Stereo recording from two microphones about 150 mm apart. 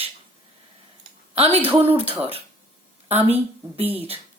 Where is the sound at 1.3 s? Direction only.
40° right (ahead or behind).